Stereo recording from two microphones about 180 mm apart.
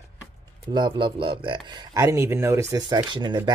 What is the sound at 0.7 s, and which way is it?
Speech, 25° right (ahead or behind).